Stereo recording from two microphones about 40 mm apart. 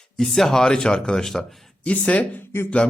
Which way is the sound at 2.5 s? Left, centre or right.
Left.